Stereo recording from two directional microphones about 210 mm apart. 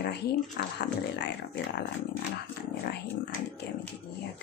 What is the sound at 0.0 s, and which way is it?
Speech, 50° left (ahead or behind).